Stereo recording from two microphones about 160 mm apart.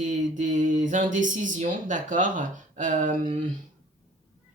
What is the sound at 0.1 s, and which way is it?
Speech, 50° right (ahead or behind).